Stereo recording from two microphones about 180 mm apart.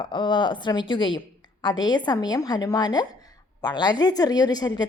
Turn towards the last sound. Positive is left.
turn(degrees=25)  # may be behind; listen again after turning